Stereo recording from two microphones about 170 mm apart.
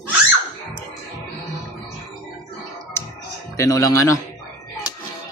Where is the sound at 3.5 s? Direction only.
20° left (ahead or behind).